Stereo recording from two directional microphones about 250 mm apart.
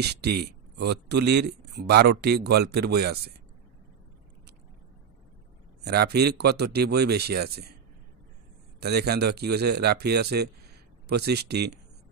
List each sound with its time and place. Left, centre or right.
0.0 s speech: right
5.9 s speech: right
8.7 s speech: right